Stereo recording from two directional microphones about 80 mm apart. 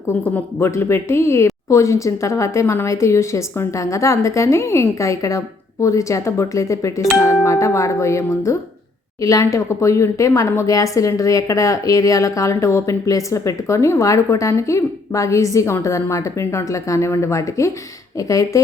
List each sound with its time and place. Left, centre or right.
0.2 s speech: left